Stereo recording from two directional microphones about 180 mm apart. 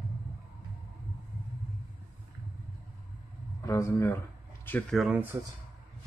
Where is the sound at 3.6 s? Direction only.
15° left (ahead or behind).